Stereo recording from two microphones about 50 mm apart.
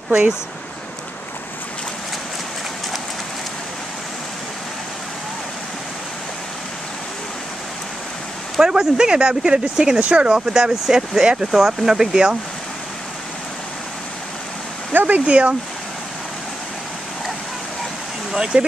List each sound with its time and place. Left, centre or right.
8.5 s speech: centre
14.9 s speech: right
18.3 s speech: centre